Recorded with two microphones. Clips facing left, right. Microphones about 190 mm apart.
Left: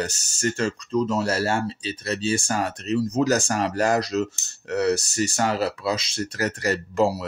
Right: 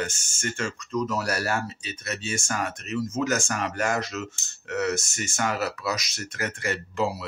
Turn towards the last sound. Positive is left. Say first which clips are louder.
# left 6 dB
turn(degrees=40)  # may be behind; listen again after turning